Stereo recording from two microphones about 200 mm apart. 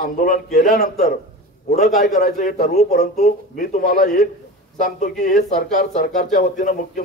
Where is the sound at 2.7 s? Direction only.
35° left (ahead or behind).